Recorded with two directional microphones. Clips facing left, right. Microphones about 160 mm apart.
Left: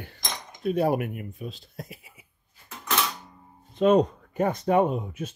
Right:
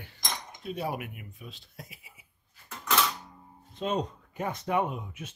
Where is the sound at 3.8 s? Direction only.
60° left (ahead or behind); by 5.4 s 40° left (ahead or behind).